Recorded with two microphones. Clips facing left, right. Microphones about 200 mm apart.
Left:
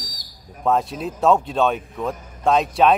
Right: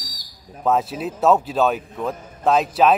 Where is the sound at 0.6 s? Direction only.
5° right (ahead or behind).